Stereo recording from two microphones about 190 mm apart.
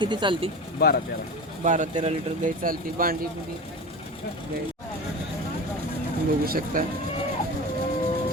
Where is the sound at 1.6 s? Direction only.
40° right (ahead or behind).